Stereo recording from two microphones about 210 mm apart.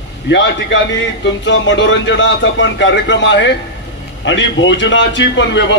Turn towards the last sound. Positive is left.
turn(degrees=60)  # may be behind; listen again after turning